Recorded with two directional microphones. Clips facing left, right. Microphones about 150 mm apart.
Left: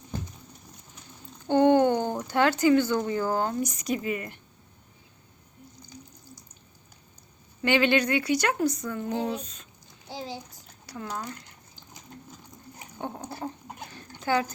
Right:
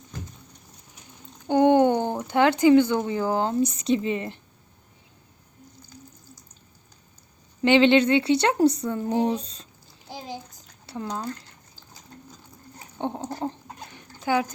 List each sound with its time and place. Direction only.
1.5 s speech: 15° right (ahead or behind)
7.6 s speech: 20° right (ahead or behind)
10.8 s speech: 25° right (ahead or behind)
13.0 s a sound: 25° right (ahead or behind)
13.3 s speech: 25° right (ahead or behind)
13.9 s dog: 15° right (ahead or behind)